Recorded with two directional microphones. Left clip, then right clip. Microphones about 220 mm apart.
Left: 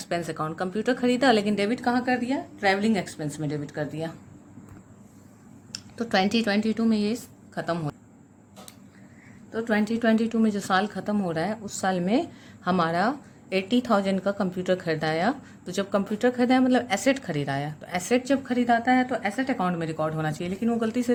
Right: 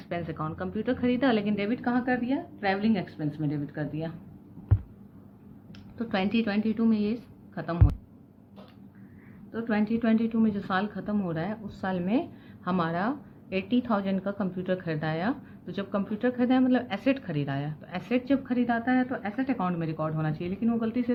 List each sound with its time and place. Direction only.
0.0 s a woman's voice: 45° left (ahead or behind)
5.7 s a woman's voice: 50° left (ahead or behind)
9.5 s a woman's voice: 50° left (ahead or behind)